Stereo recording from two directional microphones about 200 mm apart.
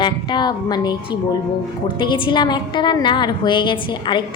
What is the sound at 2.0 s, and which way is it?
A woman's voice, 25° left (ahead or behind).